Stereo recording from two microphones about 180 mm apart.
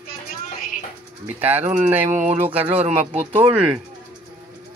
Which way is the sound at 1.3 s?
10° right (ahead or behind).